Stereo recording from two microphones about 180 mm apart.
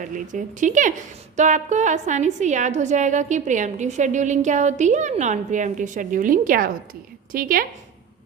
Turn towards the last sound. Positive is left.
turn(degrees=-50)  # may be behind; listen again after turning